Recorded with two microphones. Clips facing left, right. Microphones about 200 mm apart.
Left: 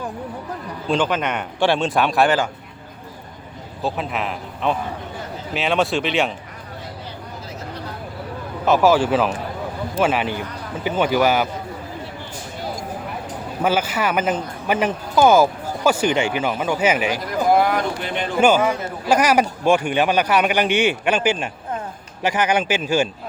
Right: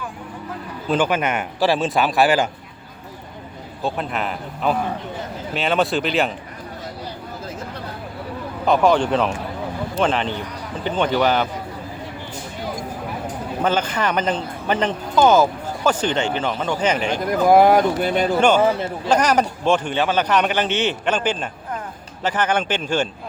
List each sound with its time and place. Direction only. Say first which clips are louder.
0.9 s a man's voice: right 1 dB; 10° right (ahead or behind)
3.8 s a man's voice: even; centre (ahead or behind)
8.6 s a man's voice: left 1 dB; 5° left (ahead or behind)
13.6 s speech: left 1 dB; 10° left (ahead or behind)
17.5 s speech: right 5 dB; 45° right (ahead or behind)
18.3 s speech: left 2 dB; 10° left (ahead or behind)
18.6 s speech: right 3 dB; 30° right (ahead or behind)
19.0 s speech: left 1 dB; 10° left (ahead or behind)